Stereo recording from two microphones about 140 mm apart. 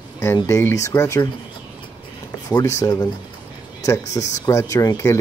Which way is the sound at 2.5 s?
25° left (ahead or behind).